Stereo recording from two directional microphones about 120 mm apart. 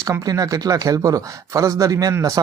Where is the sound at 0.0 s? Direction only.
25° right (ahead or behind).